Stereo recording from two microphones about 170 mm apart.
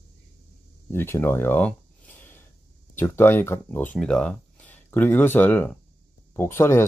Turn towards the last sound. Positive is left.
turn(degrees=15)  # may be behind; listen again after turning